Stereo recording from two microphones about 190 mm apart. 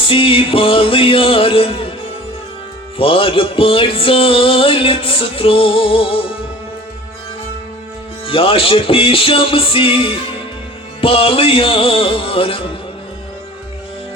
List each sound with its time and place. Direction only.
0.0 s music: 30° left (ahead or behind)
3.0 s music: 30° left (ahead or behind)
8.3 s music: 30° left (ahead or behind)